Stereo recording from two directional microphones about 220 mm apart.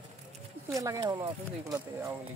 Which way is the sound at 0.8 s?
15° right (ahead or behind).